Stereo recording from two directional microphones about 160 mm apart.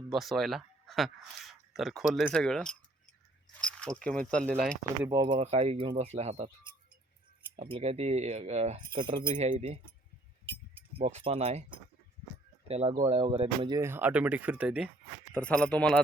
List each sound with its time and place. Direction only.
0.1 s speech: centre (ahead or behind)
4.4 s speech: 10° right (ahead or behind)
5.0 s speech: 25° right (ahead or behind)
5.4 s speech: 40° right (ahead or behind)
7.5 s speech: 40° right (ahead or behind)
8.9 s speech: 30° right (ahead or behind)
9.3 s speech: 45° right (ahead or behind)
10.4 s speech: 35° right (ahead or behind)
13.7 s speech: 15° right (ahead or behind)
15.3 s speech: 5° left (ahead or behind)